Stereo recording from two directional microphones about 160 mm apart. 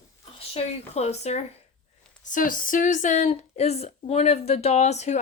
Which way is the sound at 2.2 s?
55° left (ahead or behind).